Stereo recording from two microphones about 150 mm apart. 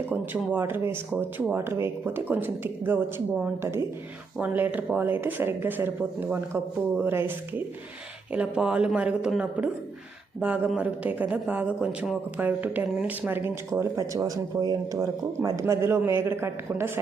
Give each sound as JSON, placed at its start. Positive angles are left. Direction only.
{"t": 0.1, "sound": "speech", "side_deg": -15}